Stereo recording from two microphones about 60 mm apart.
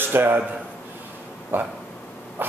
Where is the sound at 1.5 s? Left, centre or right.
Right.